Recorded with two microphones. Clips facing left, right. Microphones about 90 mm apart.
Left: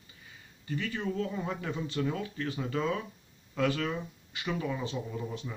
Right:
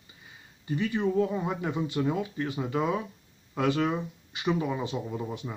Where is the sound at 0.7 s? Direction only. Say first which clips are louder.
Right 6 dB; 20° right (ahead or behind).